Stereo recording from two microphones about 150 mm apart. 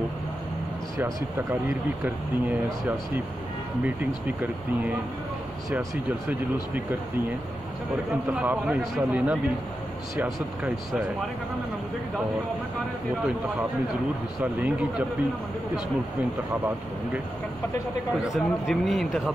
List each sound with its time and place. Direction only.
0.9 s speech: 20° right (ahead or behind)
2.0 s speech: 10° right (ahead or behind)
3.8 s speech: 10° right (ahead or behind)
8.3 s speech: 10° right (ahead or behind)
10.6 s a man's voice: centre (ahead or behind)
14.4 s speech: 10° right (ahead or behind)
18.3 s a man's voice: centre (ahead or behind)